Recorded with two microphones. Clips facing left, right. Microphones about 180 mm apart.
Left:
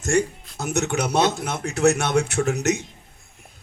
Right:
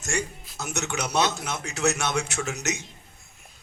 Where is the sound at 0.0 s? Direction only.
55° left (ahead or behind).